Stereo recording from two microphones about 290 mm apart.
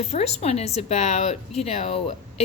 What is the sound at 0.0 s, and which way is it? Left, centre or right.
A woman's voice, left.